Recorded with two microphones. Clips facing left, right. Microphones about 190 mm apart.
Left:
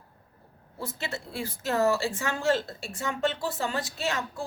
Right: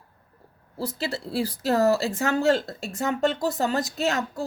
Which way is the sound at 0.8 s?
35° right (ahead or behind).